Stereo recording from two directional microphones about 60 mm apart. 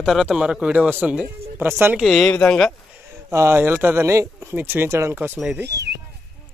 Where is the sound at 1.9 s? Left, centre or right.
Centre.